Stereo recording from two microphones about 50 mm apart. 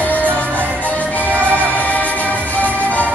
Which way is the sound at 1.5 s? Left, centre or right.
Left.